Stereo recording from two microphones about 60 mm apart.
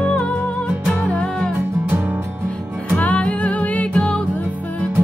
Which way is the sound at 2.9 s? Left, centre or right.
Left.